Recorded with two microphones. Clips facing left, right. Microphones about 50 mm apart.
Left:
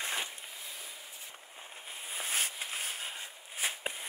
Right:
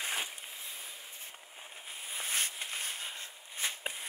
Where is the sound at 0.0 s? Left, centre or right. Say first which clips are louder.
Even; centre.